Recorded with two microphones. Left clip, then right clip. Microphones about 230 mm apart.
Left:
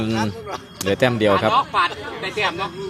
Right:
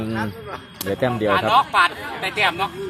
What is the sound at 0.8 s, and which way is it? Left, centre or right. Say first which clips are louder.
Speech: left 4 dB; centre.